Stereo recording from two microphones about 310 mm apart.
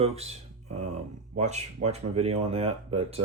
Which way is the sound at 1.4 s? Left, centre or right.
Right.